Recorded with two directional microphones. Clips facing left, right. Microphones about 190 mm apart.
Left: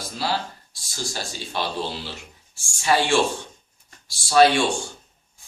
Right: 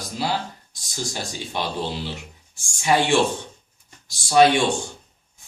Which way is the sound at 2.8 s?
20° right (ahead or behind).